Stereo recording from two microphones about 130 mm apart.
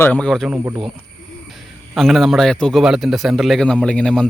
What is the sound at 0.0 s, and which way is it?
Speech, 10° left (ahead or behind).